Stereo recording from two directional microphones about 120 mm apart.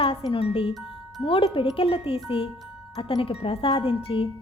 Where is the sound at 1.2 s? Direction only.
50° left (ahead or behind).